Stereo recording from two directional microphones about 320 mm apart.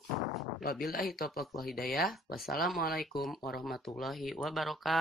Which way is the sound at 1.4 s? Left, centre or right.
Centre.